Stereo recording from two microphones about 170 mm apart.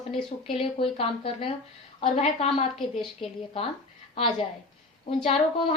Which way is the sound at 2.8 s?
Centre (ahead or behind).